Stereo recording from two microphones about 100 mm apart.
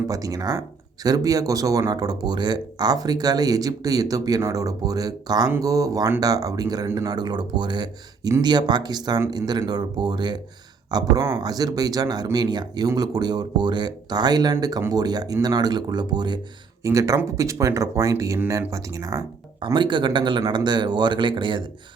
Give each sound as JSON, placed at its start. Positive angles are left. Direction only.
{"t": 0.1, "sound": "speech", "side_deg": -35}
{"t": 16.8, "sound": "speech", "side_deg": -35}
{"t": 19.5, "sound": "speech", "side_deg": -50}